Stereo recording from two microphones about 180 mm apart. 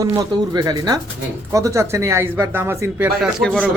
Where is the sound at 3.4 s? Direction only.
5° left (ahead or behind).